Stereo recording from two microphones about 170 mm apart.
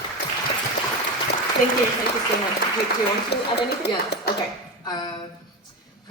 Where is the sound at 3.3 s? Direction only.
75° left (ahead or behind).